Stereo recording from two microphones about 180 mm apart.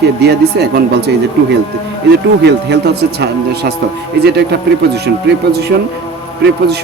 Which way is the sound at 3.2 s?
70° right (ahead or behind).